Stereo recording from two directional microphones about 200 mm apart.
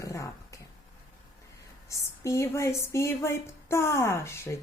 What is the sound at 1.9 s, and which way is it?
Speech, 15° left (ahead or behind).